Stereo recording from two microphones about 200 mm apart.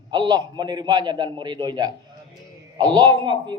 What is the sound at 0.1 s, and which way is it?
A man's voice, 20° right (ahead or behind).